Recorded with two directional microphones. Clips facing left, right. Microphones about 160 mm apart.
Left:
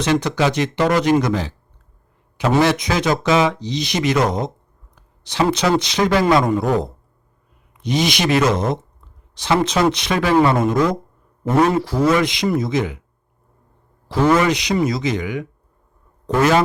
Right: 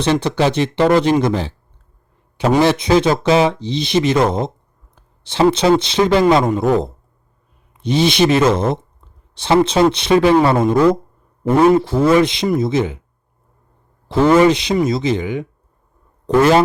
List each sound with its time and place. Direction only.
0.0 s speech: 30° right (ahead or behind)
2.6 s speech: 30° right (ahead or behind)
14.1 s speech: 25° right (ahead or behind)